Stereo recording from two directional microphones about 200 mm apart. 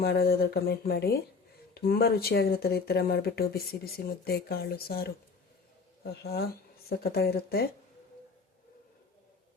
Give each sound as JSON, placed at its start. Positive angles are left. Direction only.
{"t": 0.0, "sound": "speech", "side_deg": 50}